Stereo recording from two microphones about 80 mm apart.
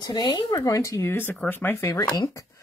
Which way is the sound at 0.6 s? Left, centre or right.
Left.